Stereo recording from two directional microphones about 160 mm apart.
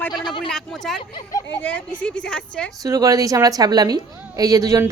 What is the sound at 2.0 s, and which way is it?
Speech, 5° left (ahead or behind).